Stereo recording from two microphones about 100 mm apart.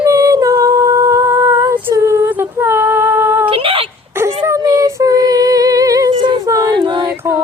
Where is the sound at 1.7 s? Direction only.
25° right (ahead or behind).